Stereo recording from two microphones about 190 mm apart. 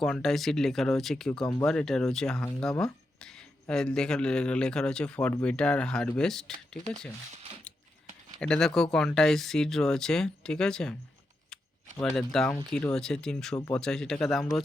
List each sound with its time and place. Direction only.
0.0 s speech: centre (ahead or behind)
8.4 s speech: 5° left (ahead or behind)
11.9 s speech: 5° left (ahead or behind)